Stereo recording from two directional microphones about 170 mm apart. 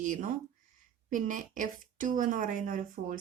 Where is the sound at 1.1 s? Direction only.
50° right (ahead or behind).